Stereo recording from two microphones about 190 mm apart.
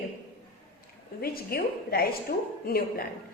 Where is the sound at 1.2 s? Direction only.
55° left (ahead or behind).